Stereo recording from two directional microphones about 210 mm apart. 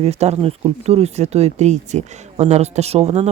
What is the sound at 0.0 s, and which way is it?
Speech, 30° right (ahead or behind).